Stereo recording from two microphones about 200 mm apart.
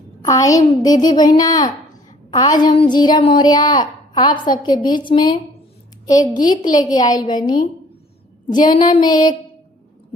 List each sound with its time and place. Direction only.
0.3 s a woman's voice: 15° left (ahead or behind)
6.1 s a woman's voice: 40° left (ahead or behind)
6.7 s a woman's voice: 20° left (ahead or behind)